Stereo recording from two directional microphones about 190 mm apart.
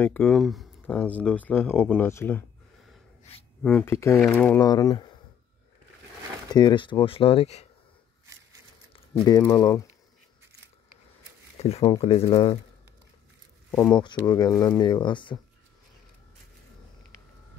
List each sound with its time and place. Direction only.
0.0 s speech: 10° left (ahead or behind)
3.6 s speech: 10° left (ahead or behind)
4.6 s speech: 20° left (ahead or behind)
6.5 s speech: 25° left (ahead or behind)
8.9 s a sound: 20° left (ahead or behind)
9.4 s speech: 15° left (ahead or behind)
12.0 s speech: 30° left (ahead or behind)
13.9 s speech: 25° left (ahead or behind)